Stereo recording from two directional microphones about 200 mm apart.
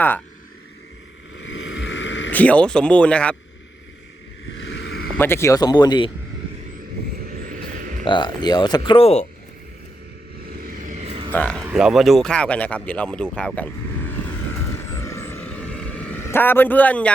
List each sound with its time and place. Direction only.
1.4 s a sound: 65° left (ahead or behind)
2.3 s speech: 5° left (ahead or behind)
4.5 s a sound: 65° left (ahead or behind)
5.1 s speech: 10° left (ahead or behind)
7.3 s frog: 45° right (ahead or behind)
8.0 s speech: 25° left (ahead or behind)
10.6 s vehicle: 40° right (ahead or behind)
11.3 s speech: 10° left (ahead or behind)
11.6 s speech: 5° right (ahead or behind)
15.0 s vehicle: 15° left (ahead or behind)